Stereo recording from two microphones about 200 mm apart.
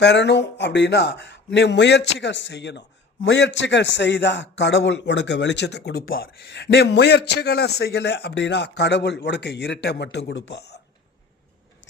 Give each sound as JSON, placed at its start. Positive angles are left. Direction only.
{"t": 0.0, "sound": "a man's voice", "side_deg": 60}